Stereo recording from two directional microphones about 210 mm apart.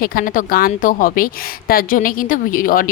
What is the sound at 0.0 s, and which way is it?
A woman's voice, 45° left (ahead or behind).